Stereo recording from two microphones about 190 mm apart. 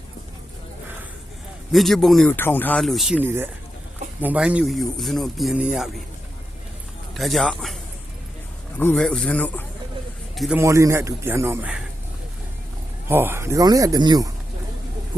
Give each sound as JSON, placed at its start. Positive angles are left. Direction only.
{"t": 1.7, "sound": "speech", "side_deg": 0}
{"t": 3.2, "sound": "speech", "side_deg": -10}
{"t": 7.1, "sound": "speech", "side_deg": 0}
{"t": 8.8, "sound": "a man's voice", "side_deg": 5}
{"t": 10.6, "sound": "speech", "side_deg": -15}
{"t": 13.1, "sound": "speech", "side_deg": -10}